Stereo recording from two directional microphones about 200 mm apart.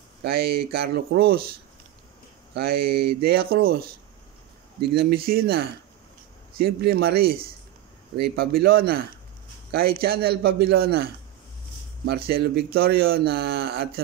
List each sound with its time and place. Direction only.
0.2 s speech: 50° right (ahead or behind)
2.5 s speech: 50° right (ahead or behind)
12.1 s speech: 50° right (ahead or behind)